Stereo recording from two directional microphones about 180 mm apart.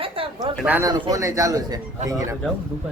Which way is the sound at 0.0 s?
30° right (ahead or behind).